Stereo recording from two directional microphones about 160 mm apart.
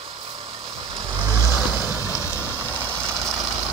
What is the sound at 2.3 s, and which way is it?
Vehicle, 15° left (ahead or behind).